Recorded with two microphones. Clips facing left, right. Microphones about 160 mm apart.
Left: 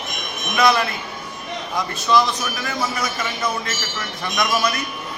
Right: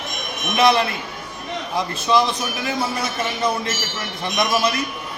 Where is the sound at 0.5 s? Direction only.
25° right (ahead or behind).